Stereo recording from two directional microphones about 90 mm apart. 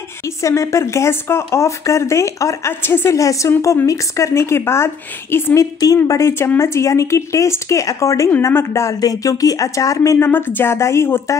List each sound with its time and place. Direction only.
0.4 s speech: 35° left (ahead or behind)
10.1 s speech: 25° left (ahead or behind)